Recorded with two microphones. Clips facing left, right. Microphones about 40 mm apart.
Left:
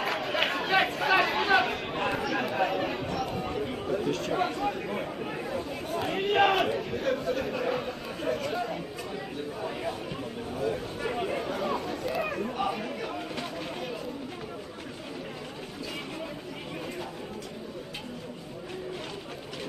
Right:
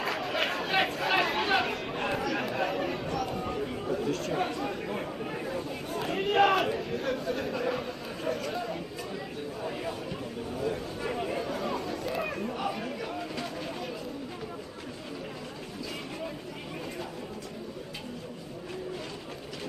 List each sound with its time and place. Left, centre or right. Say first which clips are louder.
0.0 s chatter: left 2 dB; centre
1.9 s a sound: left 1 dB; centre
3.0 s chatter: left 1 dB; centre
7.4 s speech: left 1 dB; centre
9.6 s a sound: left 1 dB; centre
11.1 s chatter: left 1 dB; centre